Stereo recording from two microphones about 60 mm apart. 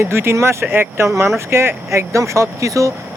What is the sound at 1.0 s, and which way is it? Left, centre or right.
Speech, right.